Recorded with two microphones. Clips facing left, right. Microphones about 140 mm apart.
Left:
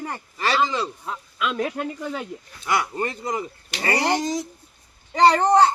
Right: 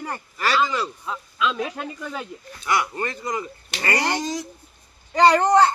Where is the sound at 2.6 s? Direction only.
20° left (ahead or behind).